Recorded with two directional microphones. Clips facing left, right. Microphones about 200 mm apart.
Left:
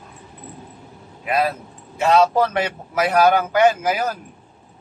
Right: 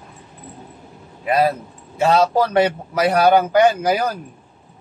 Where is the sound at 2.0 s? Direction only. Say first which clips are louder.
Even; 35° right (ahead or behind).